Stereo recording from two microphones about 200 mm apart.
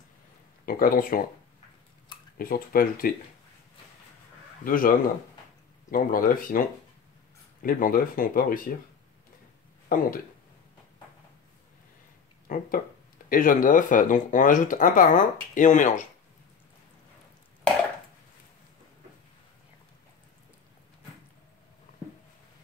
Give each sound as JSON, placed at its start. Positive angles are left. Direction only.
{"t": 0.7, "sound": "speech", "side_deg": 45}
{"t": 2.3, "sound": "speech", "side_deg": 45}
{"t": 4.6, "sound": "speech", "side_deg": 45}
{"t": 7.6, "sound": "speech", "side_deg": 45}
{"t": 9.8, "sound": "speech", "side_deg": 45}
{"t": 12.4, "sound": "speech", "side_deg": 45}